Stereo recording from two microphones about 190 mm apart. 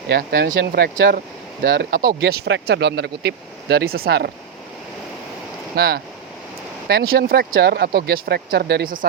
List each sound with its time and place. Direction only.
0.1 s speech: 60° right (ahead or behind)
1.6 s speech: 60° right (ahead or behind)
5.7 s speech: 55° right (ahead or behind)